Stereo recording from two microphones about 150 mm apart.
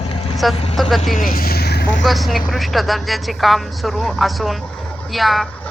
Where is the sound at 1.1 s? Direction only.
70° left (ahead or behind); by 2.0 s 90° left.